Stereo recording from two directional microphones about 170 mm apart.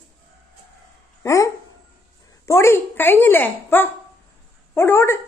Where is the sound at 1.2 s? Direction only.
15° left (ahead or behind).